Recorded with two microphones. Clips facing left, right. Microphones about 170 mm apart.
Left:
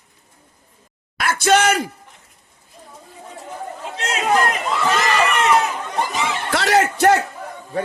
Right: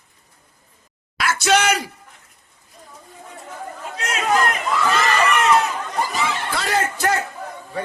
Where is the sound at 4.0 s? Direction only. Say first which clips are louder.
Left 1 dB; 30° left (ahead or behind).